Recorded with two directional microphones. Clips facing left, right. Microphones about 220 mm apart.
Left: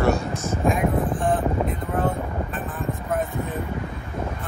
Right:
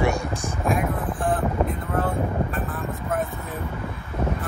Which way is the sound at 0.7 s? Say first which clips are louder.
Left 3 dB; centre (ahead or behind).